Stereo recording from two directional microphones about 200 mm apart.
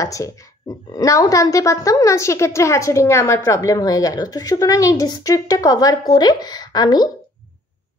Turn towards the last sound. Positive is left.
turn(degrees=20)  # may be behind; listen again after turning